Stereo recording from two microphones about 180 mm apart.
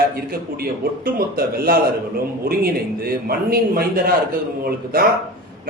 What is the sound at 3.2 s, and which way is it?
A man's voice, 55° right (ahead or behind).